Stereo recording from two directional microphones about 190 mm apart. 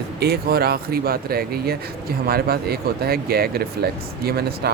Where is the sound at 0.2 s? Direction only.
55° right (ahead or behind).